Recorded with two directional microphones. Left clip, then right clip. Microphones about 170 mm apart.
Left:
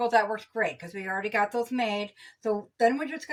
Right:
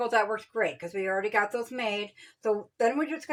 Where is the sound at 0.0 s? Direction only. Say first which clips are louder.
Left 2 dB; 45° right (ahead or behind).